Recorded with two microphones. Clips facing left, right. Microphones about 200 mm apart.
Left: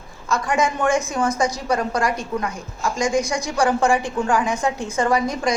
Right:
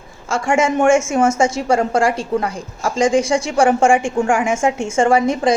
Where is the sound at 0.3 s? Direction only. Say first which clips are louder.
Right 4 dB; 25° right (ahead or behind).